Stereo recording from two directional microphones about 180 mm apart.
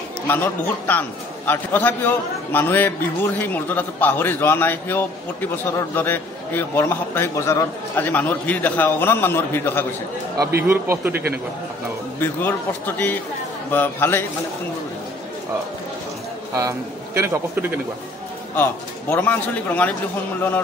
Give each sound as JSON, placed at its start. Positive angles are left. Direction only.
{"t": 0.3, "sound": "a man's voice", "side_deg": 10}
{"t": 10.7, "sound": "a man's voice", "side_deg": -10}
{"t": 12.2, "sound": "a man's voice", "side_deg": 10}
{"t": 16.5, "sound": "a man's voice", "side_deg": -15}
{"t": 18.6, "sound": "a man's voice", "side_deg": 10}